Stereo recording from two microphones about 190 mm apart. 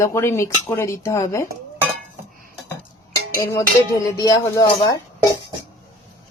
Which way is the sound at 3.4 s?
15° left (ahead or behind).